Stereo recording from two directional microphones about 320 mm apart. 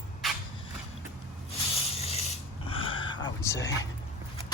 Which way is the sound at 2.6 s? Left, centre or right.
Centre.